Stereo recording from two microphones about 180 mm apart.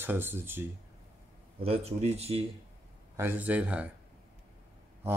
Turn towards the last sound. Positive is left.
turn(degrees=-15)  # may be behind; listen again after turning